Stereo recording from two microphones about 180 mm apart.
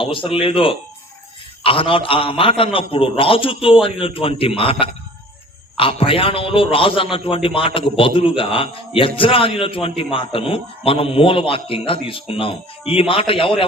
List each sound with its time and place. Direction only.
0.0 s a man's voice: 30° left (ahead or behind)